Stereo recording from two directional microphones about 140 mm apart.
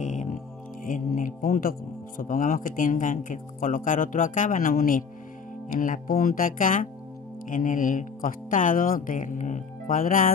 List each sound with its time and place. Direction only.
0.0 s music: 65° left (ahead or behind)
0.8 s speech: 70° left (ahead or behind)